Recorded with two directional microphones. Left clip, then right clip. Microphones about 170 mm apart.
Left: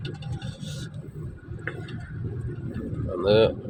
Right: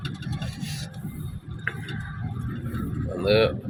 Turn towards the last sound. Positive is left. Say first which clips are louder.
# left 1 dB
turn(degrees=15)  # may be behind; listen again after turning